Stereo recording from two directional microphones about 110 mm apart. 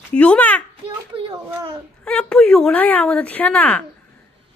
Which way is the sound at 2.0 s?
10° left (ahead or behind).